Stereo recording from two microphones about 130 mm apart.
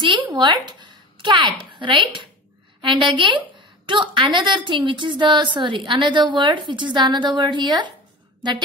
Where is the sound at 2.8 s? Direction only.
40° right (ahead or behind).